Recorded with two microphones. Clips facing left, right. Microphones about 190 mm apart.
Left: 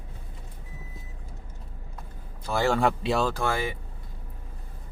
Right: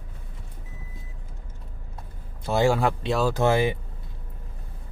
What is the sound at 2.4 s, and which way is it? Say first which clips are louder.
Speech: right 4 dB; 20° right (ahead or behind).